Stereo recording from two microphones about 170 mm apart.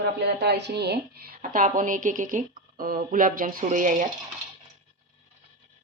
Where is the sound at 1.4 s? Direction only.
50° right (ahead or behind).